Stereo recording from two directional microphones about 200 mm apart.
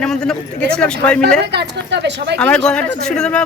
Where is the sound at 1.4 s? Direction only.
60° right (ahead or behind).